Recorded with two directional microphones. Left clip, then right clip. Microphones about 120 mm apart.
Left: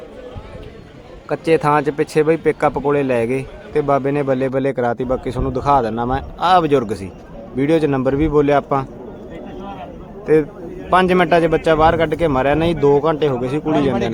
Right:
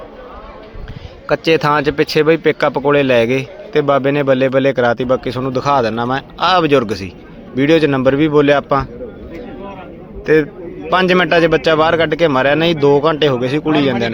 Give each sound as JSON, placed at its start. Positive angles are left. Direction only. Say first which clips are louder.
{"t": 1.3, "sound": "speech", "louder": "right 2 dB", "side_deg": -15}
{"t": 10.3, "sound": "speech", "louder": "right 2 dB", "side_deg": -15}